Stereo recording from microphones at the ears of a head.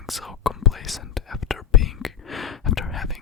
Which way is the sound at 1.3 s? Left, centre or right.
Left.